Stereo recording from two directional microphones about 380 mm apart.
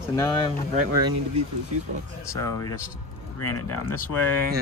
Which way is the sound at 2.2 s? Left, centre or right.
Centre.